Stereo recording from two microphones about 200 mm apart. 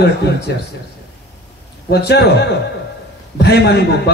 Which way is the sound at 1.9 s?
55° left (ahead or behind).